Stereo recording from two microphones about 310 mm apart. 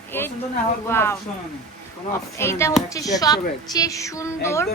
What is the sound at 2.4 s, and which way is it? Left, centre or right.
A woman's voice, centre.